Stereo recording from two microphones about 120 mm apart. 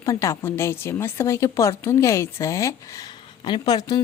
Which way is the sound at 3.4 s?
35° left (ahead or behind).